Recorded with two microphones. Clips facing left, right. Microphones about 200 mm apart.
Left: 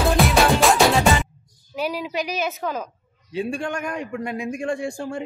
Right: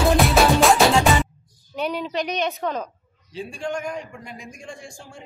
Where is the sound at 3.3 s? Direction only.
65° left (ahead or behind).